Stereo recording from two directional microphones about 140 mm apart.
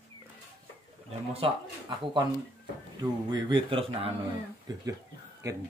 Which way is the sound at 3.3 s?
40° right (ahead or behind).